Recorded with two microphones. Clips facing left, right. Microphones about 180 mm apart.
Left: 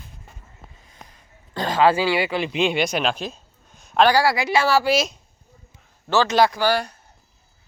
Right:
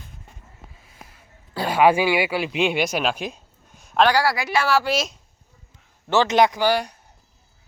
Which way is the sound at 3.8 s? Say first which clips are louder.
Left 1 dB; centre (ahead or behind).